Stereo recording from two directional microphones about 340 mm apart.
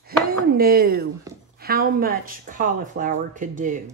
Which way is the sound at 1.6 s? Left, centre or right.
Right.